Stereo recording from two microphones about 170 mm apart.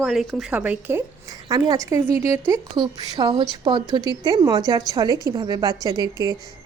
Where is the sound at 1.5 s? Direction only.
20° right (ahead or behind).